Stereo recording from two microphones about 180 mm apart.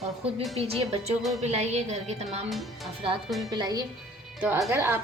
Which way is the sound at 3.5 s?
20° right (ahead or behind).